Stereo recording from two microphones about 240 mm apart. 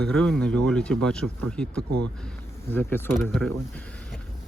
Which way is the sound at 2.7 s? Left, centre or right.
Centre.